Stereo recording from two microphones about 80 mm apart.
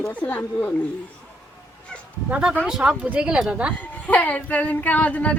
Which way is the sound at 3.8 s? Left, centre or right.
Centre.